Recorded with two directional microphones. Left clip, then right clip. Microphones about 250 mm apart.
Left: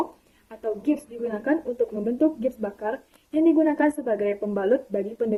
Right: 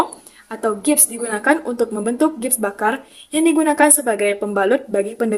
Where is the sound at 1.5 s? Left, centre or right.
Right.